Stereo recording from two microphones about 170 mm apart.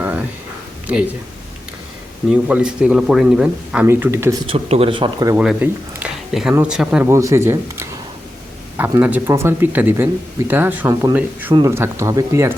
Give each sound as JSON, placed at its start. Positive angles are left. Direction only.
{"t": 0.0, "sound": "a sound", "side_deg": -10}
{"t": 2.3, "sound": "speech", "side_deg": -5}
{"t": 4.4, "sound": "speech", "side_deg": -35}
{"t": 5.4, "sound": "speech", "side_deg": -5}
{"t": 7.1, "sound": "speech", "side_deg": -15}